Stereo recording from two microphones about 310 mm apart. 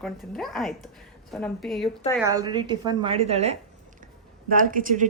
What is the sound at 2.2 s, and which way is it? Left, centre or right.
A woman's voice, centre.